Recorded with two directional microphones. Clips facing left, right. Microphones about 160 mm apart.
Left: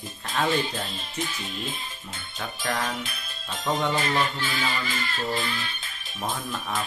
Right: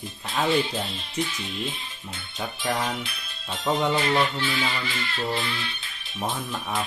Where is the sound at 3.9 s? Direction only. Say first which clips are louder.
Right 3 dB; 45° left (ahead or behind).